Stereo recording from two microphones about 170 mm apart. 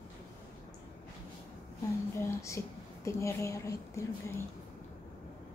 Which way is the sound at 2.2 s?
15° left (ahead or behind).